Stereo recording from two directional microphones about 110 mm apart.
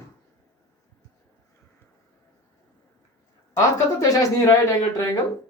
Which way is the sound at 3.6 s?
30° left (ahead or behind).